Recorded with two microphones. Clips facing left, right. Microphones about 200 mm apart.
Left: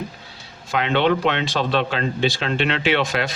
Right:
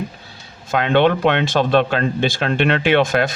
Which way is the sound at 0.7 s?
50° right (ahead or behind).